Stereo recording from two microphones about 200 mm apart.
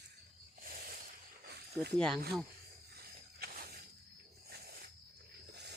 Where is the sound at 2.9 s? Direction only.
50° right (ahead or behind).